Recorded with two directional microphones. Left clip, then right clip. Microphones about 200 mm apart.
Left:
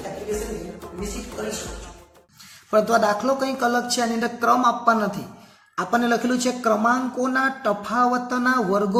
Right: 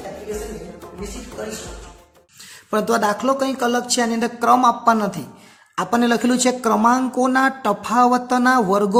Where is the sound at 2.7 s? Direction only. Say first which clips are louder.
Even; 45° right (ahead or behind).